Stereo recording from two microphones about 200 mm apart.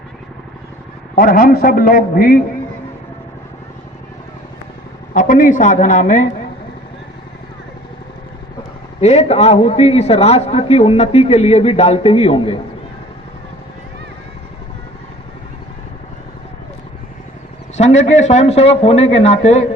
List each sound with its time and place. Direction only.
1.1 s a man's voice: 45° left (ahead or behind)
5.1 s a man's voice: 40° left (ahead or behind)
9.0 s a man's voice: 35° left (ahead or behind)
17.7 s a man's voice: 35° left (ahead or behind)